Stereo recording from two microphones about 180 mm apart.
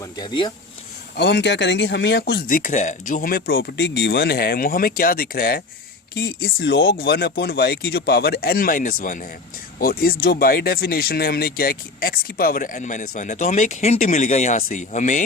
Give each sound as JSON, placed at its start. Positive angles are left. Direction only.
{"t": 0.0, "sound": "speech", "side_deg": 25}
{"t": 1.1, "sound": "speech", "side_deg": 70}
{"t": 2.5, "sound": "speech", "side_deg": 45}